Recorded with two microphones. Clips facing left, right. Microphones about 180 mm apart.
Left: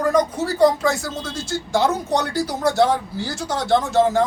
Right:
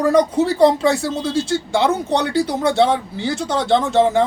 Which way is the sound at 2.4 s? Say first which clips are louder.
Right 2 dB; 60° right (ahead or behind).